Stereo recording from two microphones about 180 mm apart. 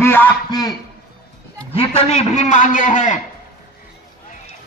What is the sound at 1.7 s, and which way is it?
A man's voice, 35° left (ahead or behind).